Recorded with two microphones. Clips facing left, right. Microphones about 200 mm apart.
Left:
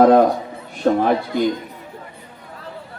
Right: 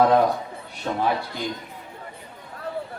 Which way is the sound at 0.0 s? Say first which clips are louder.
Left 6 dB; 50° left (ahead or behind).